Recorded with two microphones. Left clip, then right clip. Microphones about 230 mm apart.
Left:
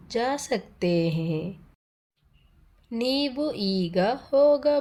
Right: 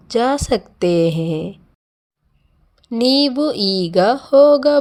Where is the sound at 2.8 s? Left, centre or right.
Right.